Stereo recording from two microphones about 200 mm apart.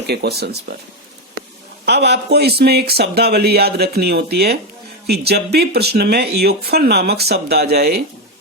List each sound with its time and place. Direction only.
0.1 s speech: 55° right (ahead or behind)
1.8 s speech: 55° right (ahead or behind)